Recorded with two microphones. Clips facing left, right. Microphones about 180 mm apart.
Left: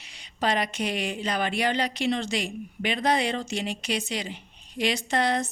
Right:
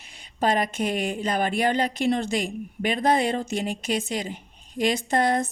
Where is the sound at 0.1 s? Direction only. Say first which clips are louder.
Right 3 dB; 50° right (ahead or behind).